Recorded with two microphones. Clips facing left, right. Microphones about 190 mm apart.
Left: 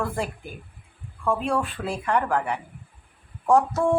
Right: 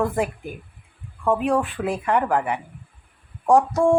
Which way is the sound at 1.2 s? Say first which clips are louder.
Right 4 dB; 15° right (ahead or behind).